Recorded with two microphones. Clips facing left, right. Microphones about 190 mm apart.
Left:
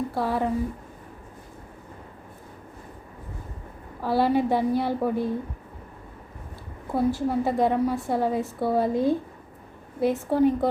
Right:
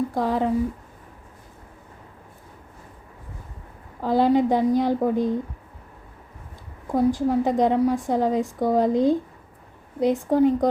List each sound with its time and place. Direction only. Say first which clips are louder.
0.1 s speech: right 3 dB; 15° right (ahead or behind)
4.0 s a woman's voice: right 3 dB; 15° right (ahead or behind)
6.8 s a woman's voice: right 3 dB; 15° right (ahead or behind)